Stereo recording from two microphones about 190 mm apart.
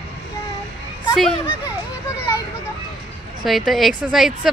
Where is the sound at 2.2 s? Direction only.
15° left (ahead or behind).